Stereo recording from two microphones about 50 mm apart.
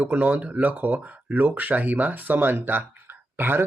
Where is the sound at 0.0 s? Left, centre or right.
Right.